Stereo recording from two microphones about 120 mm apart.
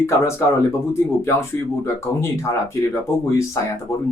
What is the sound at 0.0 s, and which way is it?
Speech, 20° left (ahead or behind).